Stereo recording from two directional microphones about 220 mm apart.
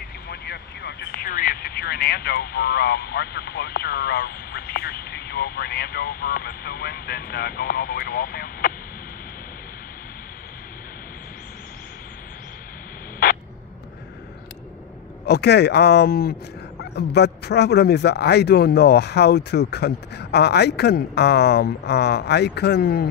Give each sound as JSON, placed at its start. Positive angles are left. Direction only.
{"t": 0.3, "sound": "speech", "side_deg": 45}
{"t": 15.2, "sound": "speech", "side_deg": 50}